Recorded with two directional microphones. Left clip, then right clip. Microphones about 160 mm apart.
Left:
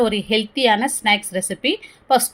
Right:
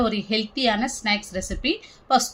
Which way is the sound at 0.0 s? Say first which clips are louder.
Left 5 dB; 35° left (ahead or behind).